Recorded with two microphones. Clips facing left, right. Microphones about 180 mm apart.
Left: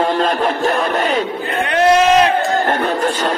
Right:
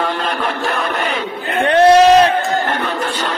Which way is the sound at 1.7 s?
35° right (ahead or behind).